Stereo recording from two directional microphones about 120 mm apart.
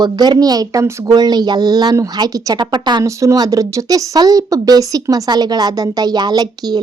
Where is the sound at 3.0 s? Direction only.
25° right (ahead or behind).